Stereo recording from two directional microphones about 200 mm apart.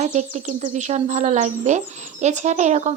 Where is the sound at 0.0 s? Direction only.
35° right (ahead or behind).